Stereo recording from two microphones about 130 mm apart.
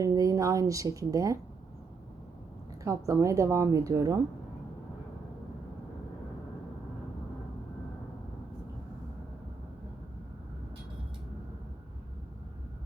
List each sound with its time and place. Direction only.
0.0 s speech: 30° right (ahead or behind)
2.8 s speech: 25° right (ahead or behind)